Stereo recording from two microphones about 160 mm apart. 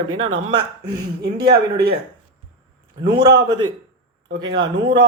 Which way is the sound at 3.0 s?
30° right (ahead or behind).